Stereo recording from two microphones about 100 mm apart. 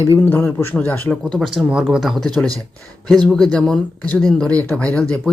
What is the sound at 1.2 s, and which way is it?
Speech, centre (ahead or behind).